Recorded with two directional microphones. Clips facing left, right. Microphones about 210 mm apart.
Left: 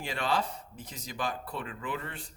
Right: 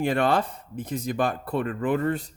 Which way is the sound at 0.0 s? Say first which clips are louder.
Right 9 dB; 55° right (ahead or behind).